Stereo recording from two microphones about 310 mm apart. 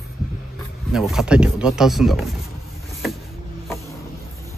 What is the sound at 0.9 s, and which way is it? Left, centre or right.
Speech, centre.